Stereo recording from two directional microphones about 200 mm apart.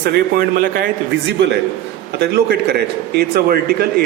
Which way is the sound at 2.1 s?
55° right (ahead or behind).